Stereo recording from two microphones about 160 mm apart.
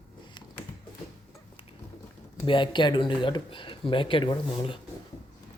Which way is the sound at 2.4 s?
30° left (ahead or behind).